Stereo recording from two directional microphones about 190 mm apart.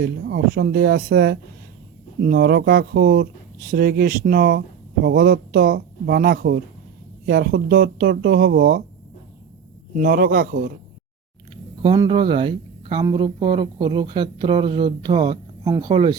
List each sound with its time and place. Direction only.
0.0 s speech: 50° right (ahead or behind)
9.9 s speech: 45° right (ahead or behind)
11.8 s speech: 25° right (ahead or behind)